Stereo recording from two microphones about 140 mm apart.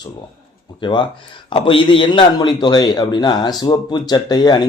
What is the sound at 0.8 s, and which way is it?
A man's voice, 35° left (ahead or behind).